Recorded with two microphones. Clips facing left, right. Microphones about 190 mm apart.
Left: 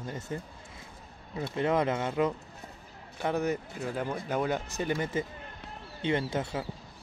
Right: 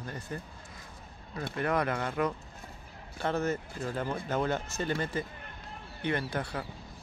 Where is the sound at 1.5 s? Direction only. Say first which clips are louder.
Left 3 dB; 20° left (ahead or behind).